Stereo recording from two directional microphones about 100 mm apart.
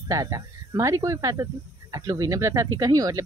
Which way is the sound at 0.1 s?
35° right (ahead or behind).